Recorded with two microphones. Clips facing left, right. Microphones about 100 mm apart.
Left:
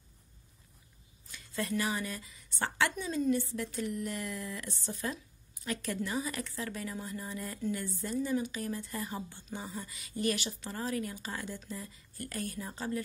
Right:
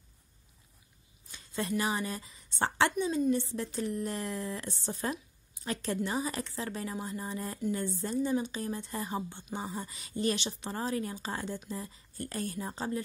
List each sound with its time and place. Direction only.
1.3 s a woman's voice: 25° right (ahead or behind)